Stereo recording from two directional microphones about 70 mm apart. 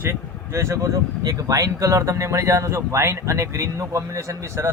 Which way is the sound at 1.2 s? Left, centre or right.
Right.